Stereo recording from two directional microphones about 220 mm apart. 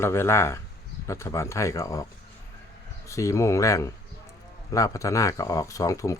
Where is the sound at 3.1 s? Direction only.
15° left (ahead or behind).